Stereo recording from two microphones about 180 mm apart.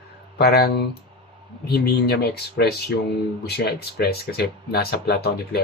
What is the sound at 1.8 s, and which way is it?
Speech, 60° left (ahead or behind).